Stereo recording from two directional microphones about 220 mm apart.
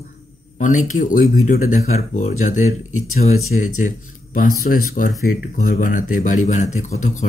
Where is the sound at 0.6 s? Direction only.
35° left (ahead or behind).